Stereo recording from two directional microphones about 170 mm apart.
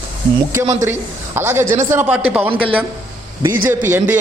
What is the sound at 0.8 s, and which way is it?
A woman's voice, 15° right (ahead or behind).